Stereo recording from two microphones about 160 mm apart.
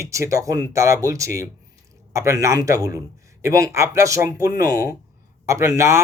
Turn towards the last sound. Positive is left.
turn(degrees=-20)  # may be behind; listen again after turning